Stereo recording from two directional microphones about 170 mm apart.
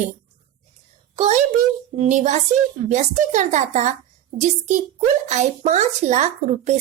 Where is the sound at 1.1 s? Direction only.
40° right (ahead or behind).